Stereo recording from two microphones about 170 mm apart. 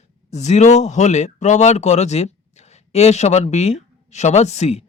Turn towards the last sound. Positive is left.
turn(degrees=40)  # may be behind; listen again after turning